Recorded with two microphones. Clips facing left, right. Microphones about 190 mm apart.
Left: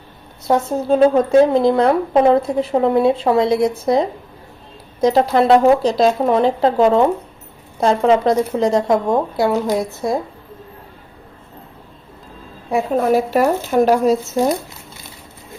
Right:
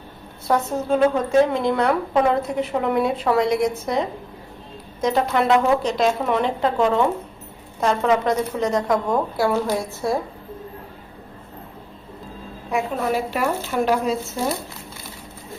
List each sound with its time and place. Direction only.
0.5 s speech: 25° left (ahead or behind)
0.9 s a woman's voice: 35° left (ahead or behind); by 10.2 s 15° left (ahead or behind)
12.7 s a woman's voice: 40° left (ahead or behind)